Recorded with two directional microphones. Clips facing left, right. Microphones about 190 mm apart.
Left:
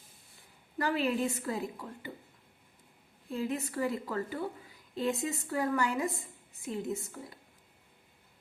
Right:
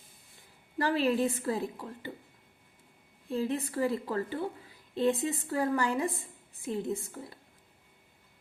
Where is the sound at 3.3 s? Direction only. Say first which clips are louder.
Right 3 dB; 35° right (ahead or behind).